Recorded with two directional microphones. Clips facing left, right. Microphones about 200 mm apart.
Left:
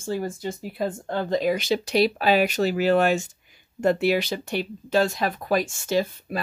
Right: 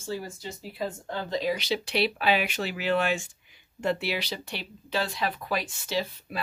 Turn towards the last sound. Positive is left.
turn(degrees=45)  # may be behind; listen again after turning